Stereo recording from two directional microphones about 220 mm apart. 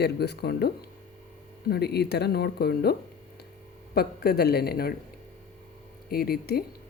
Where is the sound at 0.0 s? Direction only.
50° left (ahead or behind).